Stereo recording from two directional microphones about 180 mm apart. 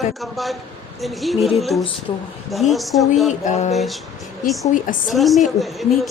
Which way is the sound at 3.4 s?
40° left (ahead or behind).